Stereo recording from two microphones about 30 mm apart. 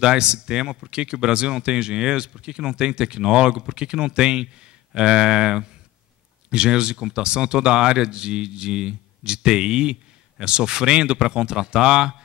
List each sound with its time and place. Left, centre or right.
0.0 s speech: right